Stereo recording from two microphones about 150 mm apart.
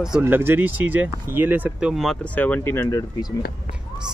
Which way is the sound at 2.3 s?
10° left (ahead or behind).